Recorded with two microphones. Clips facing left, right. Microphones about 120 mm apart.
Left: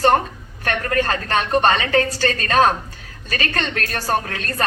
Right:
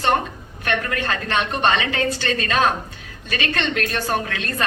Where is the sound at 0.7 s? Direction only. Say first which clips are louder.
Left 3 dB; 40° left (ahead or behind).